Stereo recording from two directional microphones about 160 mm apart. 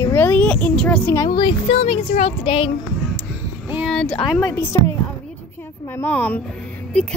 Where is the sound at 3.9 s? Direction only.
5° left (ahead or behind).